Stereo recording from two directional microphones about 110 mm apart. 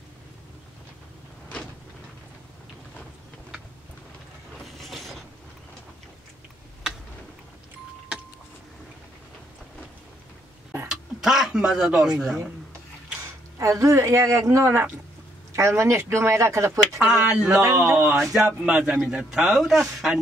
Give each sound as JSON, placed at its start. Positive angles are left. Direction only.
{"t": 4.7, "sound": "mechanisms", "side_deg": 0}
{"t": 10.9, "sound": "speech", "side_deg": -5}
{"t": 13.6, "sound": "speech", "side_deg": -30}
{"t": 17.0, "sound": "a man's voice", "side_deg": -5}